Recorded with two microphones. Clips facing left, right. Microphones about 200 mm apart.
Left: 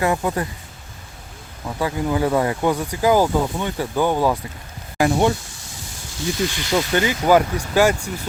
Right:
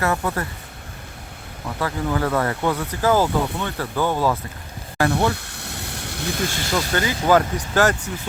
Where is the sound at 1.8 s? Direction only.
15° left (ahead or behind).